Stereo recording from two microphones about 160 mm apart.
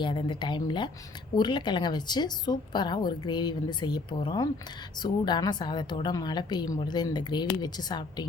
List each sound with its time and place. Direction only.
0.0 s a woman's voice: 30° left (ahead or behind)